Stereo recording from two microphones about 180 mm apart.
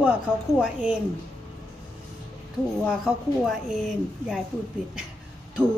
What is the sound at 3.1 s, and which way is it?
A woman's voice, 5° right (ahead or behind).